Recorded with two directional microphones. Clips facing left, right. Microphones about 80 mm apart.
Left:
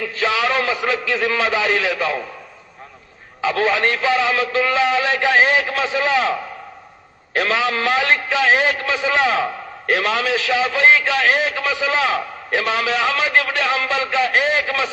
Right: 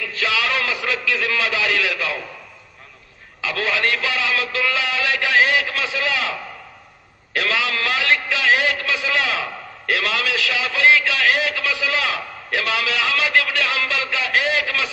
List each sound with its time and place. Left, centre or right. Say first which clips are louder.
0.1 s a man's voice: left 3 dB; left
3.3 s a man's voice: left 5 dB; left
7.3 s a man's voice: left 3 dB; left